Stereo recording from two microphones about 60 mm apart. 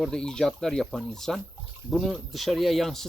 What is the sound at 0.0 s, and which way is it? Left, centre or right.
Speech, centre.